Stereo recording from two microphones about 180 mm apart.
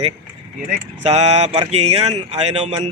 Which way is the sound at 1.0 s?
35° right (ahead or behind).